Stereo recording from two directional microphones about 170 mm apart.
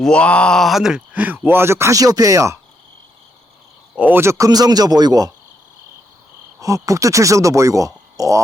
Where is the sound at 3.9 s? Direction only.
10° right (ahead or behind).